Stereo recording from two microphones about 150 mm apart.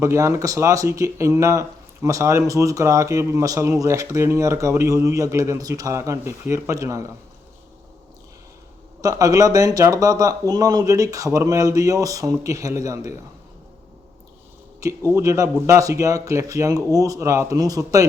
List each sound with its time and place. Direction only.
0.0 s speech: 20° right (ahead or behind)
9.0 s speech: 20° right (ahead or behind)
14.8 s speech: 20° right (ahead or behind)